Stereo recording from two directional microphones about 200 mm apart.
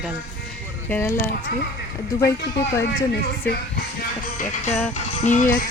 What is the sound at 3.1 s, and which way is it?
Speech, 50° left (ahead or behind).